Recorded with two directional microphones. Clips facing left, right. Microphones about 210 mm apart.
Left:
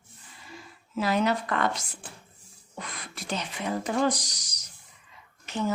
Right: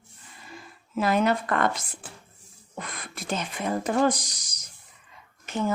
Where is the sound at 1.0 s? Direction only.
50° right (ahead or behind).